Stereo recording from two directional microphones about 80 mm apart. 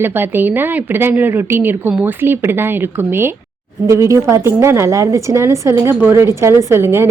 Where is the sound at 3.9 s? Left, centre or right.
Right.